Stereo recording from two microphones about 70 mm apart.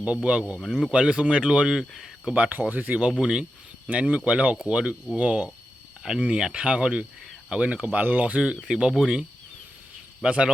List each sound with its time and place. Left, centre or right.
0.0 s speech: centre
1.9 s speech: centre
2.3 s speech: right
2.9 s speech: centre
6.0 s speech: centre
8.6 s speech: centre
10.2 s speech: centre